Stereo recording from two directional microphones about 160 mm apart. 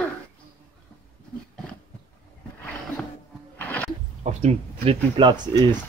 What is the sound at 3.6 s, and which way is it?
Wild animals, 10° left (ahead or behind).